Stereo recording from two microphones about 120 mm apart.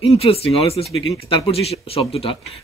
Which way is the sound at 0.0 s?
55° left (ahead or behind).